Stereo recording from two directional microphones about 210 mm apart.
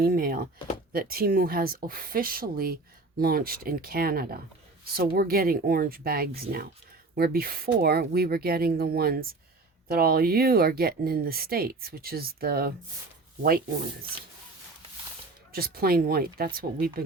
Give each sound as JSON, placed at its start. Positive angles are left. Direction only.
{"t": 0.0, "sound": "speech", "side_deg": -45}
{"t": 15.5, "sound": "speech", "side_deg": -45}